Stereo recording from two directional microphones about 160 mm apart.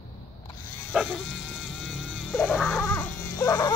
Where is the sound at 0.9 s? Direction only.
Centre (ahead or behind).